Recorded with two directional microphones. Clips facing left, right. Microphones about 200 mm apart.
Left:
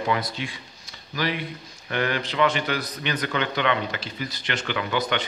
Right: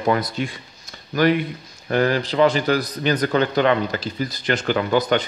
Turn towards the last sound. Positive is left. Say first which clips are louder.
# right 7 dB
turn(degrees=-40)  # may be behind; listen again after turning